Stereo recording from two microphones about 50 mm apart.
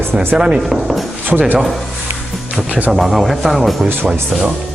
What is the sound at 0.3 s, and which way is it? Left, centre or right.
Speech, centre.